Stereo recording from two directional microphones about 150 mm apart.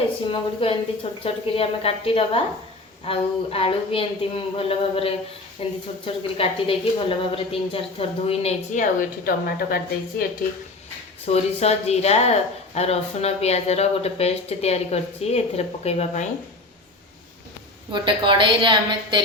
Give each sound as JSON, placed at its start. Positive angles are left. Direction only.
{"t": 0.3, "sound": "a woman's voice", "side_deg": 35}
{"t": 11.3, "sound": "speech", "side_deg": 45}
{"t": 17.9, "sound": "a woman's voice", "side_deg": -35}